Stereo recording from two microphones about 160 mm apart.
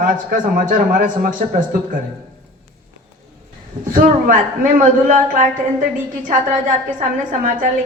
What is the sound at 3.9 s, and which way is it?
A man's voice, 60° right (ahead or behind).